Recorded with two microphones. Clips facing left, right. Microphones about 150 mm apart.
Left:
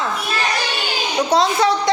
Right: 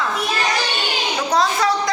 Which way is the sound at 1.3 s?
25° left (ahead or behind).